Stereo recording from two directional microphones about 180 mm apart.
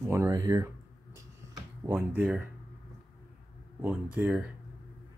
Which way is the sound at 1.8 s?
10° right (ahead or behind).